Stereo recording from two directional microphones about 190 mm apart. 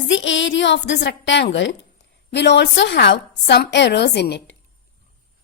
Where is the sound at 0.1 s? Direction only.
75° left (ahead or behind).